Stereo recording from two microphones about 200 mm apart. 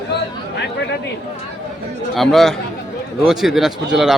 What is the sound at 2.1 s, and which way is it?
A man's voice, centre (ahead or behind).